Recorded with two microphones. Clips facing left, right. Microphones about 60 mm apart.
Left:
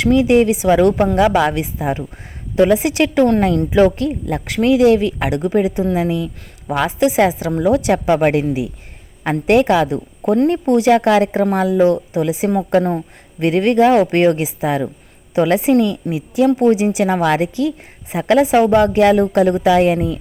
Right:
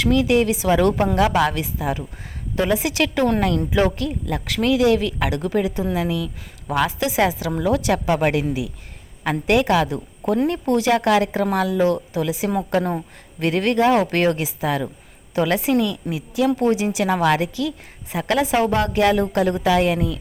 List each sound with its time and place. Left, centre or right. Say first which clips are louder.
0.0 s a woman's voice: left 5 dB; left
9.5 s a woman's voice: left 5 dB; left